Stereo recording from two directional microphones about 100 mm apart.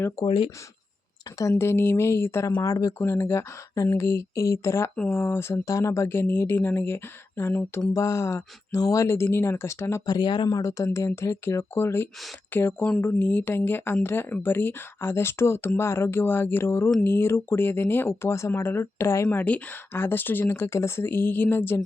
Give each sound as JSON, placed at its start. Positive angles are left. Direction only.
{"t": 0.3, "sound": "speech", "side_deg": 60}
{"t": 1.4, "sound": "speech", "side_deg": 30}
{"t": 3.0, "sound": "speech", "side_deg": 25}
{"t": 10.1, "sound": "speech", "side_deg": 50}